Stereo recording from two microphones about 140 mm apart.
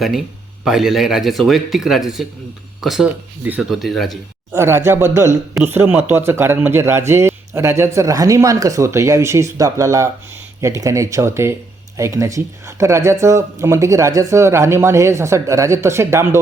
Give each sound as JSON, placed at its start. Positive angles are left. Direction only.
{"t": 0.6, "sound": "speech", "side_deg": -5}
{"t": 4.5, "sound": "speech", "side_deg": -20}